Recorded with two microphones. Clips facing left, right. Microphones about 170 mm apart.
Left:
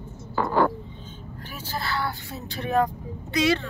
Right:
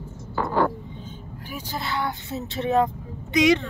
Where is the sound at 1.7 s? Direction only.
20° right (ahead or behind).